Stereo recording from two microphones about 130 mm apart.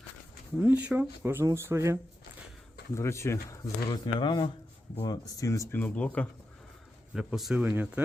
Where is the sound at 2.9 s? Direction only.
20° left (ahead or behind).